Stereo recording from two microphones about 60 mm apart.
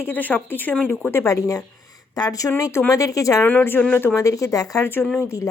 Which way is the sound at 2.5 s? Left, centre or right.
Left.